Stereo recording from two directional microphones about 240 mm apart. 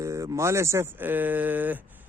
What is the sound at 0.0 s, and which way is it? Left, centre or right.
Speech, centre.